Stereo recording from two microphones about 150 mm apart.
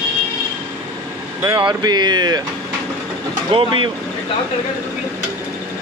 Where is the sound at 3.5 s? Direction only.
35° right (ahead or behind).